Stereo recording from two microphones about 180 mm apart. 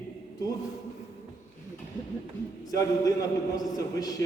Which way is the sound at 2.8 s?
20° left (ahead or behind).